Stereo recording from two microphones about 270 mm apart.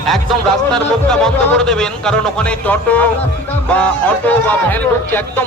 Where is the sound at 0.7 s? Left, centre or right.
Centre.